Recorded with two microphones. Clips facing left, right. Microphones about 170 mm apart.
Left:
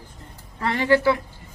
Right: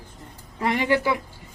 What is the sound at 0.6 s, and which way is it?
Speech, 15° right (ahead or behind).